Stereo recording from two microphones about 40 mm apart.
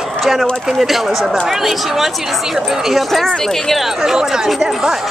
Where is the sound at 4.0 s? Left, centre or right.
Centre.